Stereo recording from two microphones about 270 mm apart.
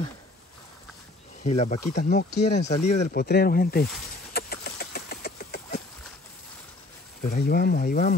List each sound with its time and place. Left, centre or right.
1.4 s speech: left
2.7 s speech: left
3.1 s speech: left
4.3 s a sound: left
7.2 s speech: left